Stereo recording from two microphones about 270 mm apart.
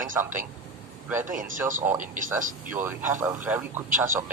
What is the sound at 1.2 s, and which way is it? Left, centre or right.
A man's voice, right.